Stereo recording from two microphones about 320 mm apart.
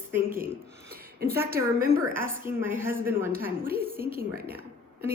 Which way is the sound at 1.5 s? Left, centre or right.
Right.